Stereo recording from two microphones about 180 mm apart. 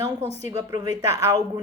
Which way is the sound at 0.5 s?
20° right (ahead or behind).